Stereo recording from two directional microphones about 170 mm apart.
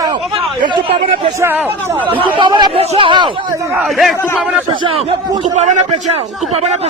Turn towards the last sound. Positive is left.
turn(degrees=-40)  # may be behind; listen again after turning